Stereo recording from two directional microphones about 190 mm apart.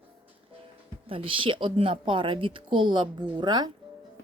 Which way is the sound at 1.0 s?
30° right (ahead or behind).